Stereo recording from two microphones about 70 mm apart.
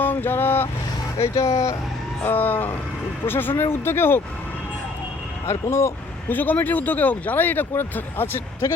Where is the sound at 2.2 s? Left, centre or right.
Left.